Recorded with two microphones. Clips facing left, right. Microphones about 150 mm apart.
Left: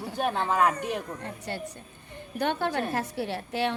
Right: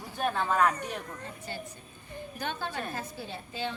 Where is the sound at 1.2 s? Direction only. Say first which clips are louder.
Left 5 dB; 65° left (ahead or behind).